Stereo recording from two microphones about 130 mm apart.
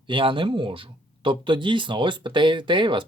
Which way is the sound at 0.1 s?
40° right (ahead or behind).